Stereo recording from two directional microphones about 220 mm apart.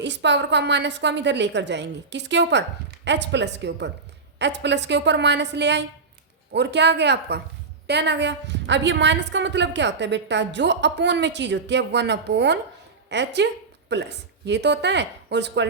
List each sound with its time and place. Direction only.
0.0 s a woman's voice: 50° right (ahead or behind)